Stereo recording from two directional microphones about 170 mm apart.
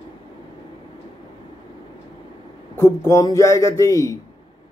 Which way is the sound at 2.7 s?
15° left (ahead or behind).